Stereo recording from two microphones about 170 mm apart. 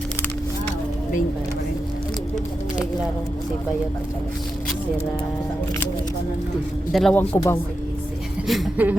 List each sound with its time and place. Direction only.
6.9 s speech: 5° left (ahead or behind)
7.3 s a woman's voice: 15° left (ahead or behind)
8.4 s speech: 5° right (ahead or behind)